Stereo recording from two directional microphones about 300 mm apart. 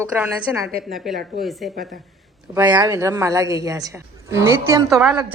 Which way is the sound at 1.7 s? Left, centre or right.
Right.